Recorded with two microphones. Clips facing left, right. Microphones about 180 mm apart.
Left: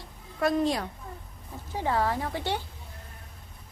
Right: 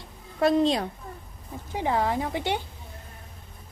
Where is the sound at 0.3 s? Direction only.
25° right (ahead or behind).